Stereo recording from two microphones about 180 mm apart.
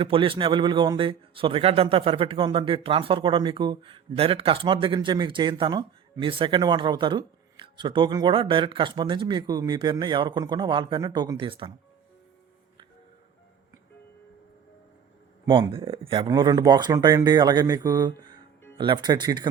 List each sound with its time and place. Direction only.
0.0 s a man's voice: 30° right (ahead or behind)
15.4 s a man's voice: 25° right (ahead or behind)